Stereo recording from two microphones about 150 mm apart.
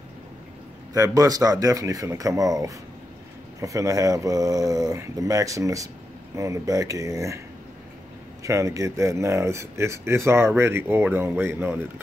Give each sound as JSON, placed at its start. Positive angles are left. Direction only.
{"t": 0.9, "sound": "speech", "side_deg": -25}
{"t": 8.4, "sound": "speech", "side_deg": -20}